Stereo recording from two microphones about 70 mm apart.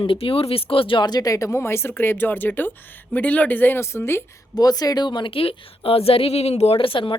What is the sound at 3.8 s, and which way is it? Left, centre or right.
Speech, left.